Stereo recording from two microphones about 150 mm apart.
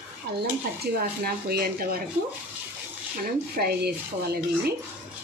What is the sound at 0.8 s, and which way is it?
Speech, 90° right.